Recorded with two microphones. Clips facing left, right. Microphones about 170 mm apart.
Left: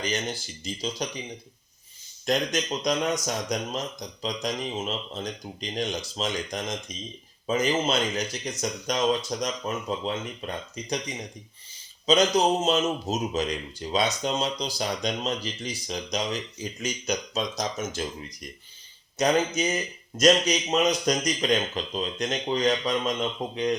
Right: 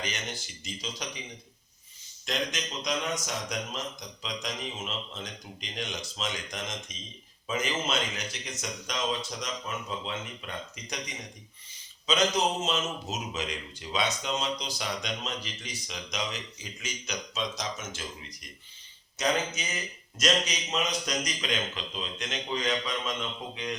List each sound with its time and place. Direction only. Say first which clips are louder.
0.0 s speech: left 7 dB; 35° left (ahead or behind)
2.2 s speech: left 7 dB; 40° left (ahead or behind)
12.0 s speech: left 6 dB; 35° left (ahead or behind)
19.2 s speech: left 6 dB; 40° left (ahead or behind)